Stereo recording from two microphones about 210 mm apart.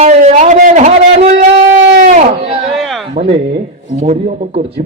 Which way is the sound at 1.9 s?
50° right (ahead or behind).